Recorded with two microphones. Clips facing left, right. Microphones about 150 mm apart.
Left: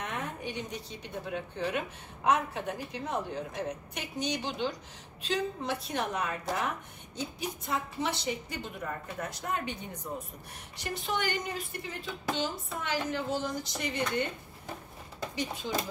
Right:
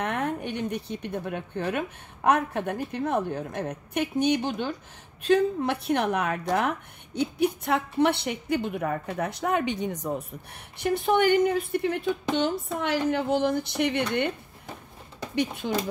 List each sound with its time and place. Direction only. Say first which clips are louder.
0.0 s a woman's voice: right 8 dB; 60° right (ahead or behind)
15.3 s a woman's voice: right 9 dB; 60° right (ahead or behind)